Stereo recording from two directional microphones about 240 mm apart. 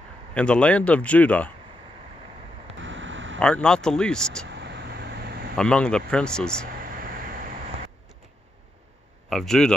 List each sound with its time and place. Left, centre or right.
0.3 s a man's voice: centre
2.8 s a sound: right
3.3 s a man's voice: centre
4.5 s vehicle: right
5.6 s a man's voice: centre
6.7 s vehicle: right
9.3 s a man's voice: centre